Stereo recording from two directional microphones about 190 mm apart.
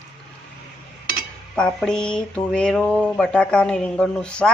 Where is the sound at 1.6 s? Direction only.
5° left (ahead or behind).